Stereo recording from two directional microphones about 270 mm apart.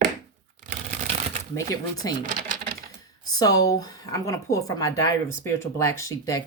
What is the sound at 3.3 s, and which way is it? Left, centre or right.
Speech, centre.